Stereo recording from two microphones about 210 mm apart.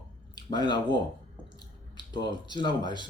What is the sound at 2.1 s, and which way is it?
Speech, 20° left (ahead or behind).